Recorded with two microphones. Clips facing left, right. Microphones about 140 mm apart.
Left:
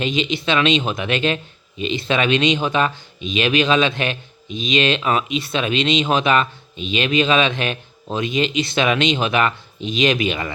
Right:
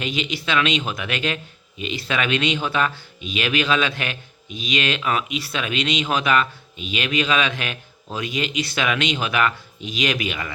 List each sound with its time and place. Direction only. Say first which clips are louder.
0.0 s speech: left 5 dB; 25° left (ahead or behind)